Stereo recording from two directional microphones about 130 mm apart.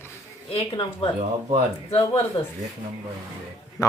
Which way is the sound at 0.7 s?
35° left (ahead or behind).